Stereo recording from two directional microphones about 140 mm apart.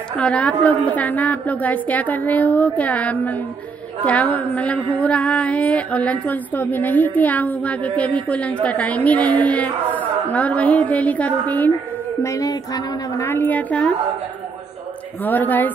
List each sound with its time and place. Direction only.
0.2 s speech: 10° left (ahead or behind)
12.2 s speech: 25° left (ahead or behind)
15.2 s speech: 10° left (ahead or behind)